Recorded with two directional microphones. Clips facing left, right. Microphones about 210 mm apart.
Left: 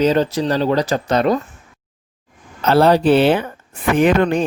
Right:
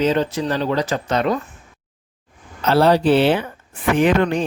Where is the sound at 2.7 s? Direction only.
50° left (ahead or behind).